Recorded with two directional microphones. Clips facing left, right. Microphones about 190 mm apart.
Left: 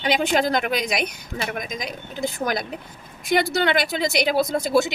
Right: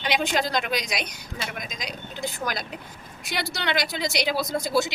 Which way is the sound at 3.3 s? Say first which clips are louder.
Left 8 dB; 55° left (ahead or behind).